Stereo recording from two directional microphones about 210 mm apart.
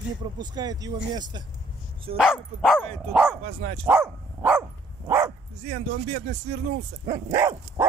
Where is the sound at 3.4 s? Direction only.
30° right (ahead or behind).